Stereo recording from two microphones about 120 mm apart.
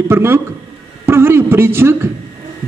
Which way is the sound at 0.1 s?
20° right (ahead or behind).